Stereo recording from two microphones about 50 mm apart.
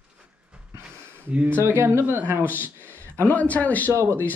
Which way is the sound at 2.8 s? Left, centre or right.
Left.